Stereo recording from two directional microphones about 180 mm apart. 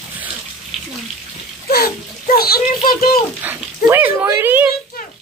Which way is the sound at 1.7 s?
60° left (ahead or behind).